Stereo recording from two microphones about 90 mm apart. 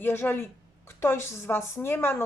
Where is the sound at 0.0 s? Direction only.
25° left (ahead or behind).